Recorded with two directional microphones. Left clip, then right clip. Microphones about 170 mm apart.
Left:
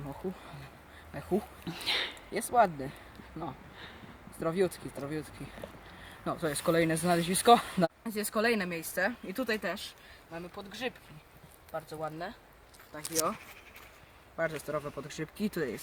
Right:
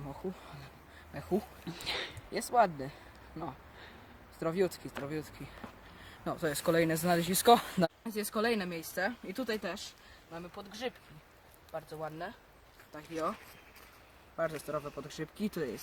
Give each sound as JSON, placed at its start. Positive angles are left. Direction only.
{"t": 0.0, "sound": "speech", "side_deg": 0}
{"t": 3.4, "sound": "a sound", "side_deg": 0}
{"t": 4.4, "sound": "speech", "side_deg": -5}
{"t": 6.2, "sound": "speech", "side_deg": -10}
{"t": 8.0, "sound": "speech", "side_deg": 5}
{"t": 14.5, "sound": "speech", "side_deg": 0}
{"t": 15.0, "sound": "speech", "side_deg": 15}
{"t": 15.5, "sound": "speech", "side_deg": 0}